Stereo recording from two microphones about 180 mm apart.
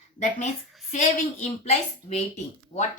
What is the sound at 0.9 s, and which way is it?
Speech, 40° left (ahead or behind).